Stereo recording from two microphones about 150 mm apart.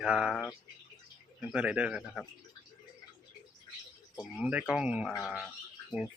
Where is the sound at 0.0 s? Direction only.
5° right (ahead or behind).